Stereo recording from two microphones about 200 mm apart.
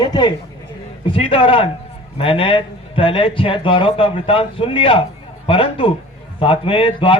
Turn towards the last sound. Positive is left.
turn(degrees=25)  # may be behind; listen again after turning